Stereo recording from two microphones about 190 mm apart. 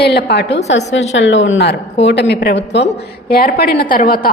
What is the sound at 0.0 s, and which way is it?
Speech, 60° left (ahead or behind).